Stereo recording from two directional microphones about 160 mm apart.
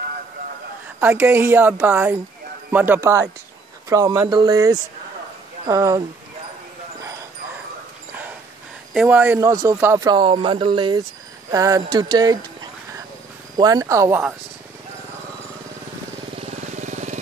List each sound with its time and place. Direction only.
1.0 s a woman's voice: 10° right (ahead or behind)
8.9 s a woman's voice: 10° right (ahead or behind)
10.0 s speech: 30° right (ahead or behind)
11.5 s speech: 20° right (ahead or behind)
13.6 s speech: 25° right (ahead or behind)
16.3 s vehicle: 45° right (ahead or behind)